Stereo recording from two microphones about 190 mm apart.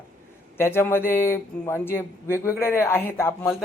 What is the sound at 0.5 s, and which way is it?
A man's voice, 10° left (ahead or behind).